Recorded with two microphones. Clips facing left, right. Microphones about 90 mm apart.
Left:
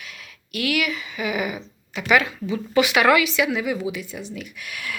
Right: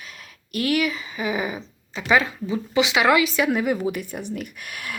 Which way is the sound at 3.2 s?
40° right (ahead or behind).